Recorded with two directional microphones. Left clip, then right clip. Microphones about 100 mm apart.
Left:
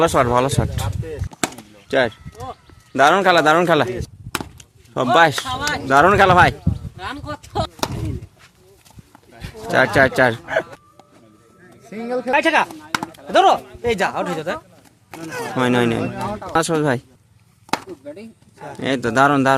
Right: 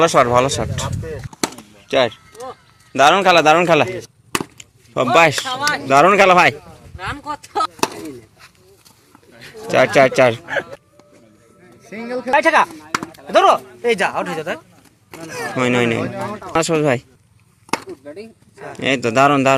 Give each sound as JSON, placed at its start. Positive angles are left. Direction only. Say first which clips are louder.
{"t": 0.0, "sound": "a man's voice", "louder": "right 3 dB", "side_deg": 20}
{"t": 1.9, "sound": "a man's voice", "louder": "right 2 dB", "side_deg": 25}
{"t": 9.3, "sound": "a sound", "louder": "even", "side_deg": 0}
{"t": 9.6, "sound": "a man's voice", "louder": "right 2 dB", "side_deg": 10}
{"t": 10.4, "sound": "speech", "louder": "left 1 dB", "side_deg": 0}
{"t": 11.8, "sound": "a man's voice", "louder": "left 1 dB", "side_deg": 15}
{"t": 13.1, "sound": "speech", "louder": "right 1 dB", "side_deg": 10}
{"t": 13.6, "sound": "speech", "louder": "right 2 dB", "side_deg": 0}
{"t": 15.1, "sound": "a man's voice", "louder": "right 1 dB", "side_deg": 15}
{"t": 16.5, "sound": "speech", "louder": "right 2 dB", "side_deg": 5}